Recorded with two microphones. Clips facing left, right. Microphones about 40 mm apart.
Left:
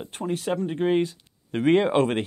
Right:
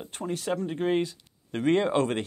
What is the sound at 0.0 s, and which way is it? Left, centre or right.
Speech, centre.